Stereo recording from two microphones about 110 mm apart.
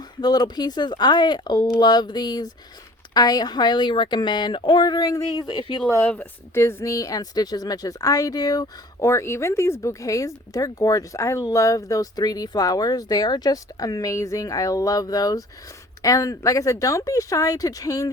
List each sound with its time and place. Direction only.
0.2 s speech: 40° left (ahead or behind)
6.0 s a woman's voice: 15° left (ahead or behind); by 9.0 s 35° left (ahead or behind)
9.0 s speech: 25° left (ahead or behind)